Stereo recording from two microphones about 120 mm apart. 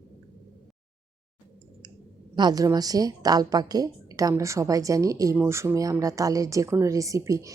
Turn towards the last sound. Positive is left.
turn(degrees=-25)  # may be behind; listen again after turning